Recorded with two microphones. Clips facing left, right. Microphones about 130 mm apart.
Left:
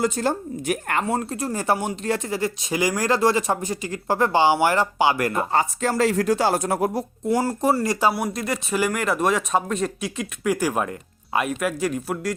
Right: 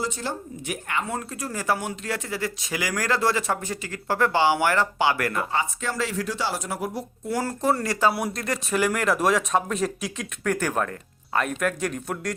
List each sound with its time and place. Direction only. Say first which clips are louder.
0.0 s speech: left 7 dB; 45° left (ahead or behind)
1.1 s speech: left 6 dB; 30° left (ahead or behind)
5.5 s speech: left 5 dB; 40° left (ahead or behind)
7.3 s speech: left 3 dB; 15° left (ahead or behind)